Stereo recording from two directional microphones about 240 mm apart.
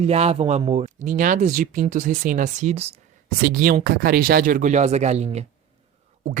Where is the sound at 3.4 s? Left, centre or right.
Right.